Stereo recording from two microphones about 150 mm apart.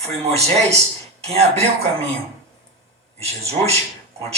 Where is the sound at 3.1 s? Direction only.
45° right (ahead or behind).